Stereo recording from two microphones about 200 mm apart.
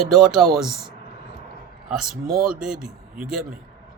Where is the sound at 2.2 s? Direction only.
45° right (ahead or behind).